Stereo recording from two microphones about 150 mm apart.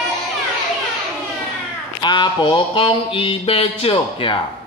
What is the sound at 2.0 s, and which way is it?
Mantra, 30° left (ahead or behind).